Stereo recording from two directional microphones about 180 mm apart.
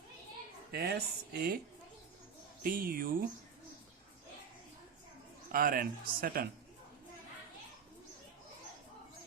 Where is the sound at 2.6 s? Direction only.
55° right (ahead or behind).